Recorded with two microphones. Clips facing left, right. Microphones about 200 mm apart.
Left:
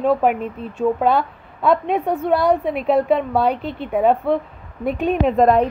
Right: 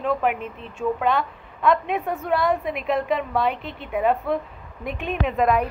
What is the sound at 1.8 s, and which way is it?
A woman's voice, 35° left (ahead or behind).